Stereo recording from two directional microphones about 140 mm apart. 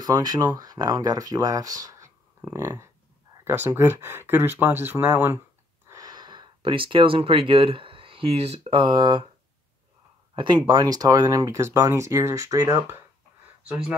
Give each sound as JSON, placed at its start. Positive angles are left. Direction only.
{"t": 0.0, "sound": "speech", "side_deg": -30}
{"t": 5.9, "sound": "speech", "side_deg": -25}
{"t": 10.3, "sound": "speech", "side_deg": -35}